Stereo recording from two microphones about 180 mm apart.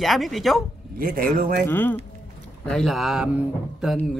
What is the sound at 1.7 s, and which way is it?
Speech, 10° left (ahead or behind).